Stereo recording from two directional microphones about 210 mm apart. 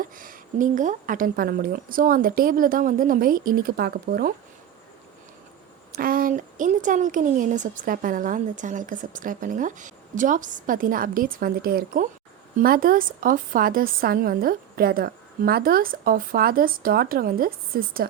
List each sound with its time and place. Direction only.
0.0 s a woman's voice: 40° right (ahead or behind)
5.9 s a woman's voice: 40° right (ahead or behind)